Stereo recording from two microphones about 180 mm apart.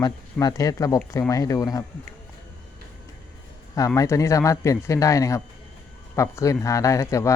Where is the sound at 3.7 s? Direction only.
20° left (ahead or behind).